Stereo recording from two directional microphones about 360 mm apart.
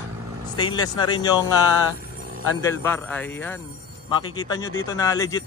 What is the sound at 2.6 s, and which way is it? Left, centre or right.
A man's voice, centre.